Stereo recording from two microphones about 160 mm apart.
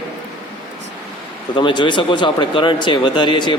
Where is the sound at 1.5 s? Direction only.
30° left (ahead or behind).